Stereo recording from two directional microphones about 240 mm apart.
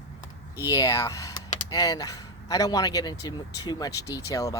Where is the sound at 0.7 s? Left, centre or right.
Centre.